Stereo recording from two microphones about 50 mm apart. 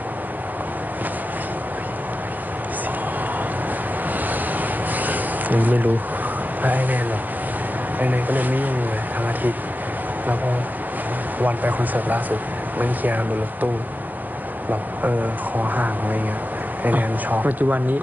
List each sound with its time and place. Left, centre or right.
4.3 s a sound: right
6.6 s speech: right
8.0 s speech: right
11.4 s speech: right
15.6 s speech: right